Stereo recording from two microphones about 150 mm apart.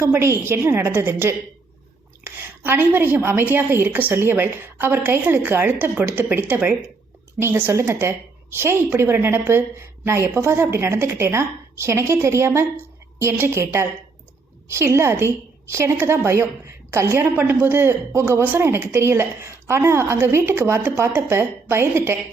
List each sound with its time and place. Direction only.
0.1 s a woman's voice: 15° right (ahead or behind)